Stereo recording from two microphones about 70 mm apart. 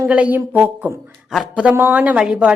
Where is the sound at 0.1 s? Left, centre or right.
Right.